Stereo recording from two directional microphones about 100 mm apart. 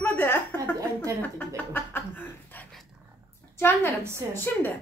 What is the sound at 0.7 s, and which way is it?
Speech, 30° right (ahead or behind).